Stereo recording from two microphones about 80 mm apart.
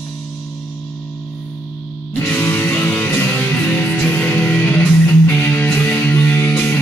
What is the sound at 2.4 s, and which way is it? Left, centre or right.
Music, left.